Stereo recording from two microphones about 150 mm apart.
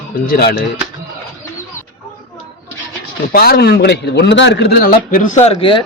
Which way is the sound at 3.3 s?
90° left.